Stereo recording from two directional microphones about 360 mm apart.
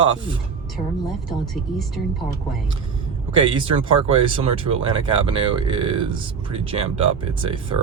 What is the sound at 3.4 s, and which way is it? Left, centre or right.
Speech, centre.